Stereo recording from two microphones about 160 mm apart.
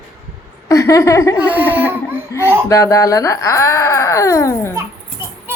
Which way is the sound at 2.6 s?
20° left (ahead or behind).